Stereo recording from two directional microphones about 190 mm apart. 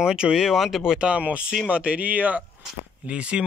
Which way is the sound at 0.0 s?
5° right (ahead or behind).